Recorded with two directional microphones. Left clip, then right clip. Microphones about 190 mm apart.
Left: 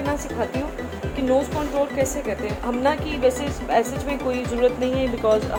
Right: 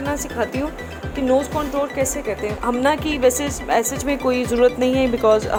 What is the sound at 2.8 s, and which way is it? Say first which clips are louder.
Speech: right 3 dB; 55° right (ahead or behind).